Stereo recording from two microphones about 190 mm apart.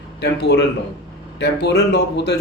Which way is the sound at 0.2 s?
60° left (ahead or behind).